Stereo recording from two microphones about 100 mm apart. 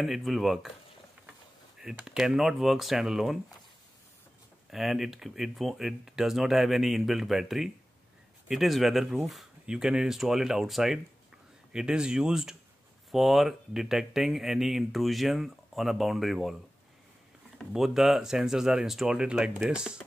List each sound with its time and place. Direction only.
0.0 s speech: centre (ahead or behind)
1.8 s speech: 5° right (ahead or behind)
4.6 s speech: 5° right (ahead or behind)
17.6 s speech: 5° right (ahead or behind)